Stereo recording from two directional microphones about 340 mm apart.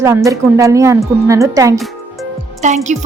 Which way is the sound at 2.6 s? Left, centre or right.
Right.